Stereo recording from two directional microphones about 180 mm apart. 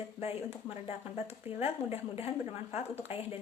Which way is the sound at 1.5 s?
35° left (ahead or behind).